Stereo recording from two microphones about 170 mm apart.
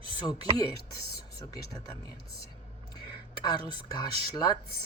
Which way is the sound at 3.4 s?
25° left (ahead or behind).